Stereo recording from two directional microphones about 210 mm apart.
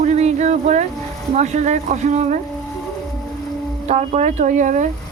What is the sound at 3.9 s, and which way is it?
Speech, 35° right (ahead or behind).